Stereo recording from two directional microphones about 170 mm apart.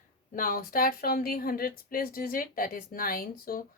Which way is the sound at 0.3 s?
55° left (ahead or behind).